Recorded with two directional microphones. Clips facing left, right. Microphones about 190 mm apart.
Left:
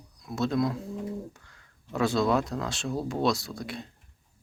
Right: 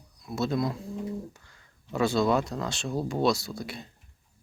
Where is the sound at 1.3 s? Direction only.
Centre (ahead or behind).